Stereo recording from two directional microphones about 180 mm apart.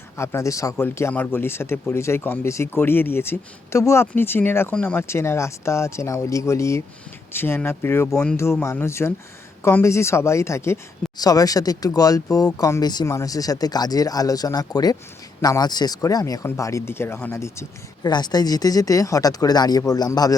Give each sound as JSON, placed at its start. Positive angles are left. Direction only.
{"t": 0.2, "sound": "speech", "side_deg": 15}